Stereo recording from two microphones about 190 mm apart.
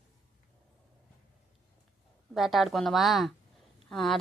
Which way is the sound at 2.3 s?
Centre (ahead or behind).